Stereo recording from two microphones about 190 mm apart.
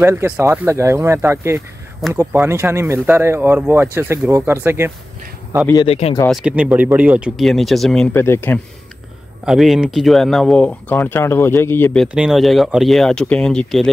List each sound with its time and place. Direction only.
0.0 s speech: 15° right (ahead or behind)
5.9 s speech: 30° left (ahead or behind)
6.2 s speech: 5° right (ahead or behind)
9.4 s speech: centre (ahead or behind)
12.1 s speech: 5° right (ahead or behind)